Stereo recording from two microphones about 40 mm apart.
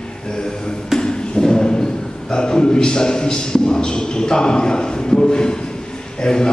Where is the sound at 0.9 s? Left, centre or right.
Centre.